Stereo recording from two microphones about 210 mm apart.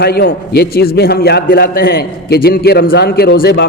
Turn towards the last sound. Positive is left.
turn(degrees=50)  # may be behind; listen again after turning